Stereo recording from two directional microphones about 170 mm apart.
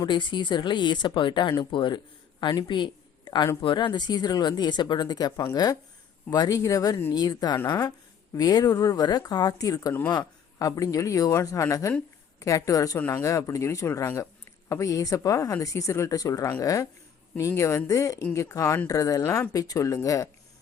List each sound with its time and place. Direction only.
0.0 s a woman's voice: 25° left (ahead or behind)